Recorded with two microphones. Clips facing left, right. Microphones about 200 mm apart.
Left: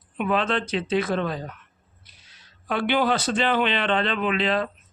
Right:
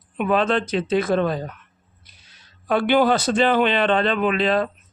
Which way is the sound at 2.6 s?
45° right (ahead or behind).